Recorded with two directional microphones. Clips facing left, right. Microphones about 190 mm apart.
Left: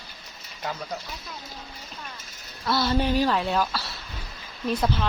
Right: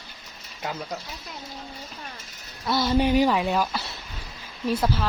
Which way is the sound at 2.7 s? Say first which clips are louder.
Right 2 dB; 15° right (ahead or behind).